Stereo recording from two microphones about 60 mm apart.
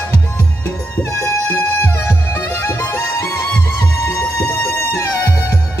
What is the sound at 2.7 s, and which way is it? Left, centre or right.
Music, left.